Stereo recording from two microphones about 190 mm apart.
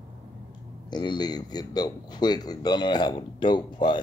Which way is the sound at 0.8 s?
20° left (ahead or behind).